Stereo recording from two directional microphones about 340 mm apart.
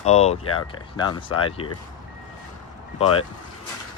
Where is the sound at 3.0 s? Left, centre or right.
Centre.